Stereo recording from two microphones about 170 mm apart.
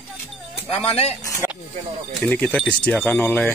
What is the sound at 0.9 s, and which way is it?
Speech, 35° left (ahead or behind).